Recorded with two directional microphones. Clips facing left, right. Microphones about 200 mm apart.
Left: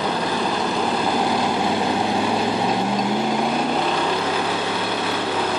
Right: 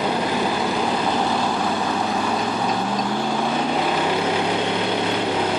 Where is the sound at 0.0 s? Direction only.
10° right (ahead or behind).